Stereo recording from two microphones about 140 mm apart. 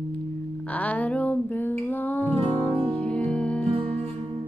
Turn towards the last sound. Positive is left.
turn(degrees=10)  # may be behind; listen again after turning